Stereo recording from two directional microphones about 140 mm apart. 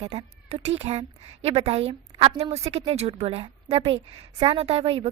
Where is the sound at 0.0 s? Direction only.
45° right (ahead or behind).